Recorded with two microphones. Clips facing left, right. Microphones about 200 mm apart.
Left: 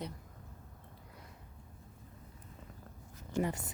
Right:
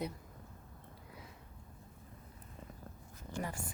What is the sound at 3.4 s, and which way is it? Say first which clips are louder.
Speech: left 7 dB; 20° left (ahead or behind).